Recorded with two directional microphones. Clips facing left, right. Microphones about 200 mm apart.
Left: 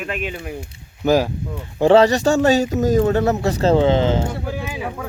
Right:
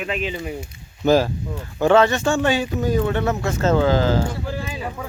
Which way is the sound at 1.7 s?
30° left (ahead or behind).